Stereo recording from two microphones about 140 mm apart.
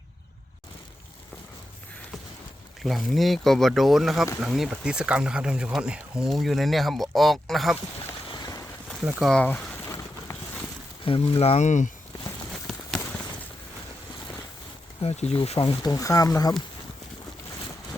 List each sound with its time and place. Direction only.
2.8 s speech: centre (ahead or behind)
8.3 s vehicle: 25° left (ahead or behind)
9.2 s speech: 10° left (ahead or behind)
11.0 s speech: 45° left (ahead or behind); by 11.9 s 60° left (ahead or behind)
15.0 s speech: 50° left (ahead or behind)
15.8 s speech: 25° left (ahead or behind)